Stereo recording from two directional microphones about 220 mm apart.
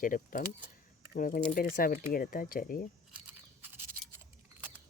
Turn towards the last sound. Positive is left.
turn(degrees=-5)  # may be behind; listen again after turning